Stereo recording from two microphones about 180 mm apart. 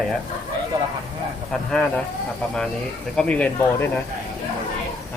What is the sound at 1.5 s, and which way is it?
Speech, 5° left (ahead or behind).